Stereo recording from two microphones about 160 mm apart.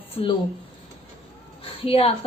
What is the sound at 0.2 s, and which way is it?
Speech, 45° left (ahead or behind).